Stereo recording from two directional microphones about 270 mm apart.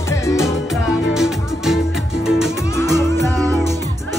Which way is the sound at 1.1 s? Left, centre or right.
Centre.